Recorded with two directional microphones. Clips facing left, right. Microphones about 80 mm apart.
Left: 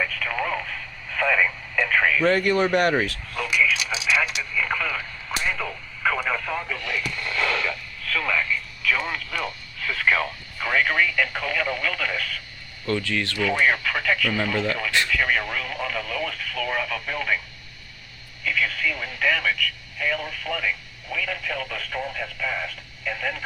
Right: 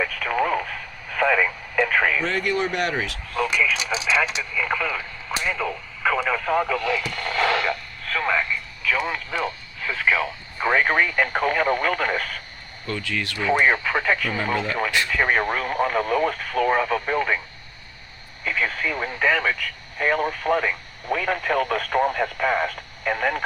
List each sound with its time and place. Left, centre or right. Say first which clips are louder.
0.0 s radio: right 4 dB; centre
2.2 s speech: left 4 dB; centre
3.4 s a sound: even; right
3.9 s speech: right 4 dB; right
4.5 s speech: right 1 dB; centre
6.6 s speech: right 7 dB; right
7.1 s radio: right 1 dB; right
8.0 s speech: right 2 dB; right
10.6 s speech: right 2 dB; right
12.9 s speech: left 3 dB; centre
18.4 s speech: right 1 dB; right